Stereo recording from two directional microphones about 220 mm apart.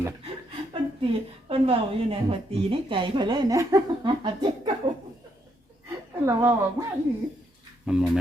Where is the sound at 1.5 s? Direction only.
25° right (ahead or behind).